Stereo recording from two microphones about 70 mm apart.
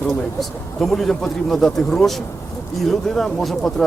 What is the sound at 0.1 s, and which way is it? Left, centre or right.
Speech, centre.